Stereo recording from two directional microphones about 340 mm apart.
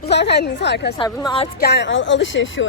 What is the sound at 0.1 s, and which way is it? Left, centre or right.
A woman's voice, left.